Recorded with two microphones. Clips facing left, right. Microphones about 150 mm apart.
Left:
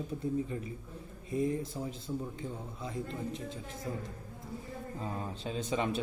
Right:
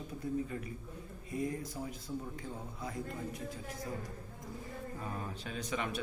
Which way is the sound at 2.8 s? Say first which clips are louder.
Left 3 dB; 25° left (ahead or behind).